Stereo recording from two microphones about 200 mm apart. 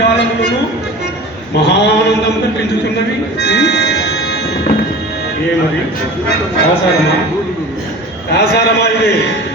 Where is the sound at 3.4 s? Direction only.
60° left (ahead or behind).